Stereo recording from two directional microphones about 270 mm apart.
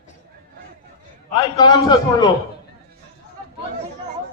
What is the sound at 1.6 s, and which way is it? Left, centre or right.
Speech, centre.